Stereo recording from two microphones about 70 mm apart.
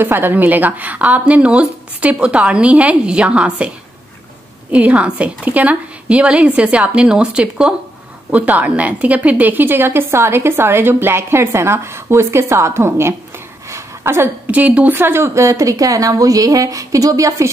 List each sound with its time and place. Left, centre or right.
0.0 s speech: right
4.7 s a woman's voice: centre
8.3 s a woman's voice: right
13.7 s a sound: right
14.5 s speech: right
15.0 s a woman's voice: right